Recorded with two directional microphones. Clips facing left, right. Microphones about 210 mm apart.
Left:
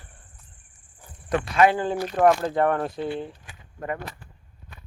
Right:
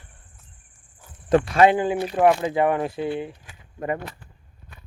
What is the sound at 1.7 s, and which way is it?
Speech, 15° right (ahead or behind).